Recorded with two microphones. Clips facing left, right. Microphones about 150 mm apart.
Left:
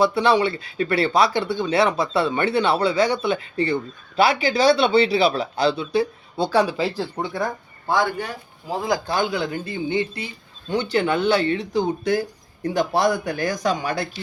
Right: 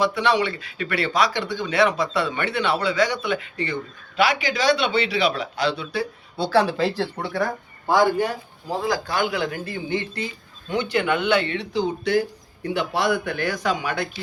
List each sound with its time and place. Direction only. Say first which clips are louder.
0.0 s speech: left 3 dB; 30° left (ahead or behind)
6.4 s speech: even; 15° left (ahead or behind)
8.9 s speech: left 2 dB; 30° left (ahead or behind)
10.7 s speech: left 1 dB; 35° left (ahead or behind)